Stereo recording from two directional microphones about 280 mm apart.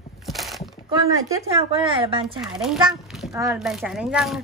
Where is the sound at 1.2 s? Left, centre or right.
Centre.